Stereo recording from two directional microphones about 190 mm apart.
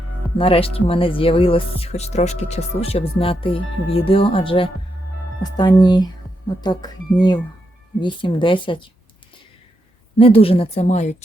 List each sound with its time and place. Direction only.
0.3 s speech: 30° left (ahead or behind)
8.0 s speech: 25° left (ahead or behind)
10.2 s speech: 30° left (ahead or behind)